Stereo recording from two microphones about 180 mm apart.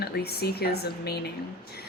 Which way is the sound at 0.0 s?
60° left (ahead or behind).